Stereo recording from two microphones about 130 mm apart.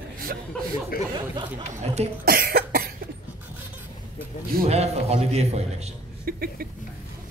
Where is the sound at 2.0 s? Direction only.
55° right (ahead or behind).